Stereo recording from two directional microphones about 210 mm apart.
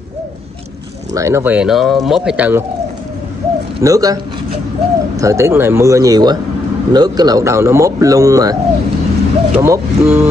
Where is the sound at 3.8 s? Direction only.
15° right (ahead or behind).